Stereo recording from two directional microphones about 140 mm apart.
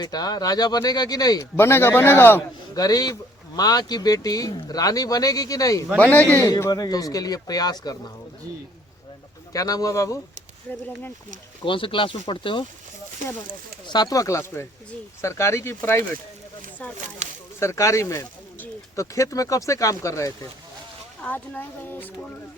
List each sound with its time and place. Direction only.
0.0 s speech: 30° left (ahead or behind)
1.5 s speech: 15° left (ahead or behind)
2.7 s speech: 25° left (ahead or behind)
6.0 s speech: 10° left (ahead or behind)
6.5 s speech: 25° left (ahead or behind)
9.5 s speech: 25° left (ahead or behind)
11.6 s speech: 35° left (ahead or behind)
13.8 s speech: 30° left (ahead or behind)
17.6 s speech: 20° left (ahead or behind)